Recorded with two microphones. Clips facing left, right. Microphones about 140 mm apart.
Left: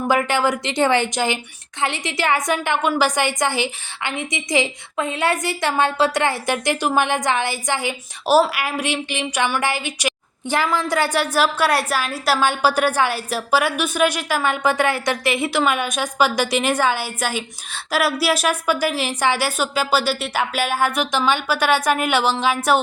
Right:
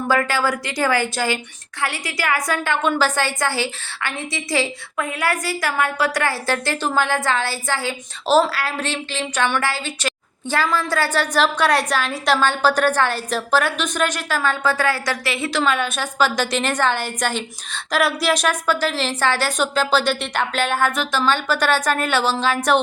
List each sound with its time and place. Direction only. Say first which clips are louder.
0.1 s speech: left 1 dB; 20° left (ahead or behind)
2.8 s a woman's voice: even; 10° left (ahead or behind)